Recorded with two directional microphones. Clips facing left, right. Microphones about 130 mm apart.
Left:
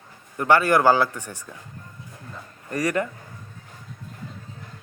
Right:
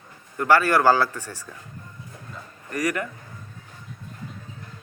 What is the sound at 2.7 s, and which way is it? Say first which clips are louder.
Speech: left 2 dB; 30° left (ahead or behind).